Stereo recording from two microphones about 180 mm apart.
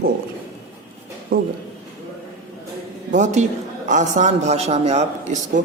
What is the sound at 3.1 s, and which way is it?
A man's voice, 40° right (ahead or behind).